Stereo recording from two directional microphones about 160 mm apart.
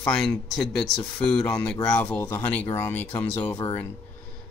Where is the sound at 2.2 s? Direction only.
15° left (ahead or behind).